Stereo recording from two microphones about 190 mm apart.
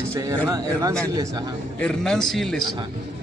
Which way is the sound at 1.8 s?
5° left (ahead or behind).